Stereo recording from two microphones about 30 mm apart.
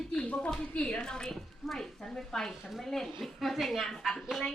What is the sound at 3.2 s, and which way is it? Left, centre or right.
A woman's voice, centre.